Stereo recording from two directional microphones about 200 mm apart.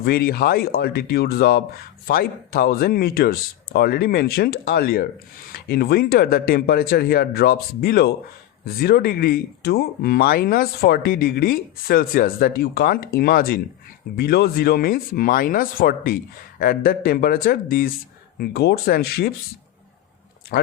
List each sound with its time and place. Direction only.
0.0 s speech: 50° left (ahead or behind)
20.5 s speech: 45° left (ahead or behind)